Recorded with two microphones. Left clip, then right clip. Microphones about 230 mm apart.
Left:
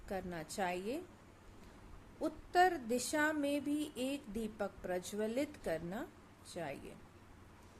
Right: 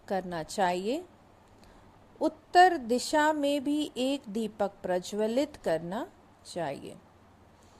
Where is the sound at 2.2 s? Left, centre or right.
Right.